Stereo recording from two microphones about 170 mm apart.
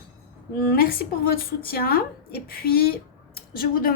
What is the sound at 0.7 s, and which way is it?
A woman's voice, 60° left (ahead or behind).